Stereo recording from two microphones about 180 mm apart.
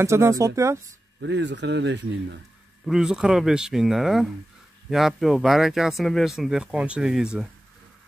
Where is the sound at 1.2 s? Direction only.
80° right.